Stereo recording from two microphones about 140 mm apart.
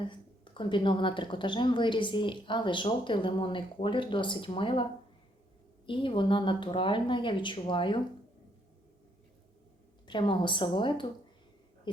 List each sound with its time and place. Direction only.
0.0 s a woman's voice: 35° left (ahead or behind)
10.1 s a woman's voice: 35° left (ahead or behind)